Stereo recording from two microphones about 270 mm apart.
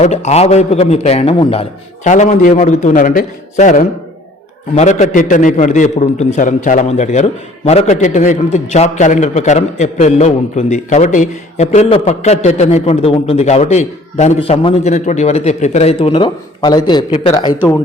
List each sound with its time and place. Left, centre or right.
0.0 s a man's voice: left